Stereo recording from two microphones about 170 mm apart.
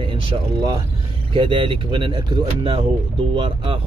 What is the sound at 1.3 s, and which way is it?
Speech, 30° right (ahead or behind).